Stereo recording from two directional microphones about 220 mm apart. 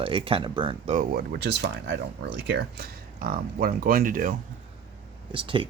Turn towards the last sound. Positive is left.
turn(degrees=-25)  # may be behind; listen again after turning